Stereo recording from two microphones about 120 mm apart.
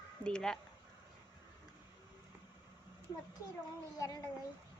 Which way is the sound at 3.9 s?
30° left (ahead or behind).